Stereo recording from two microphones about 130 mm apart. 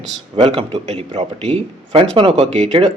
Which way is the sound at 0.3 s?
35° right (ahead or behind).